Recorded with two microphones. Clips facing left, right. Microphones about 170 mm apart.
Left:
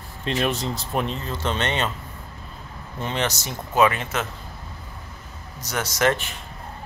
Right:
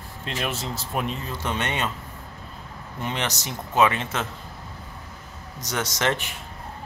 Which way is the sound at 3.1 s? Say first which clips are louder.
Left 3 dB; 15° right (ahead or behind).